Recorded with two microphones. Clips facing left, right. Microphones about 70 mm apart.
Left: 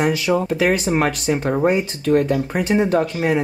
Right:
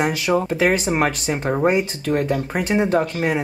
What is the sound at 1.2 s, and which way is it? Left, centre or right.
Speech, centre.